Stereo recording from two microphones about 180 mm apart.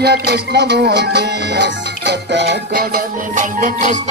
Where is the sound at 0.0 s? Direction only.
65° right (ahead or behind).